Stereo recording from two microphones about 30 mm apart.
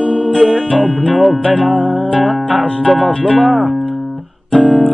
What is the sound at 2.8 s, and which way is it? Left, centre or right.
Harp, left.